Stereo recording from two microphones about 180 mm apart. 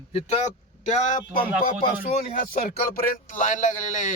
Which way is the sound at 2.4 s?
50° left (ahead or behind).